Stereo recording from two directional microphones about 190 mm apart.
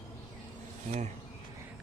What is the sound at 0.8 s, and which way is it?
Speech, 35° right (ahead or behind).